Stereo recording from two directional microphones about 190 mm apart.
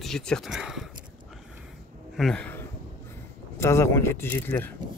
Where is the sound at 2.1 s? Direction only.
Centre (ahead or behind).